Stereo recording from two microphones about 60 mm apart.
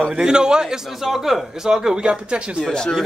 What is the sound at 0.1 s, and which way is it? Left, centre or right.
Speech, centre.